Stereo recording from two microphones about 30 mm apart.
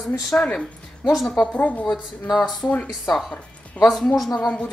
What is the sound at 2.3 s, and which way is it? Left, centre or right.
Speech, centre.